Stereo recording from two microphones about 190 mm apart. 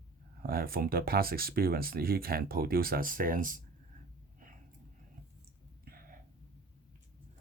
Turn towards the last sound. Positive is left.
turn(degrees=-50)  # may be behind; listen again after turning